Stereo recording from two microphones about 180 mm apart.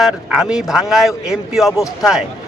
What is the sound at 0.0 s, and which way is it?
A man's voice, 5° right (ahead or behind).